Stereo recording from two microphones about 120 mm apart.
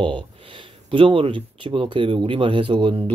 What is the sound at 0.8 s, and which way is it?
Speech, 50° right (ahead or behind).